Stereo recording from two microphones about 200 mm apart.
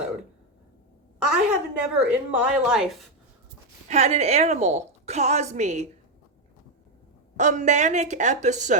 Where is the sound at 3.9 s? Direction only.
35° right (ahead or behind).